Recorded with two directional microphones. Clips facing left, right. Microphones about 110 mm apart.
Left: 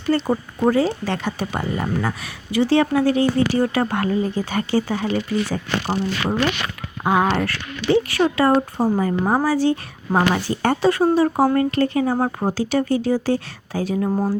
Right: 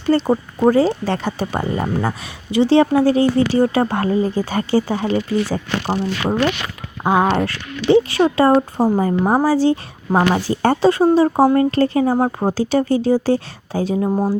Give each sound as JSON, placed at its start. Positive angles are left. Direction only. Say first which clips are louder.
{"t": 0.1, "sound": "speech", "louder": "right 5 dB", "side_deg": -35}